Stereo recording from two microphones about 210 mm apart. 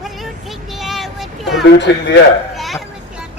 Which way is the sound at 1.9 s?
55° left (ahead or behind).